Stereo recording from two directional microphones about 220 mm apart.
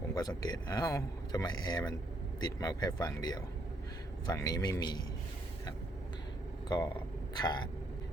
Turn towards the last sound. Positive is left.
turn(degrees=20)  # may be behind; listen again after turning